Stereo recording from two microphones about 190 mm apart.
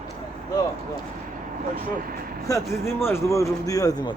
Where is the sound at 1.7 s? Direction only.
50° right (ahead or behind).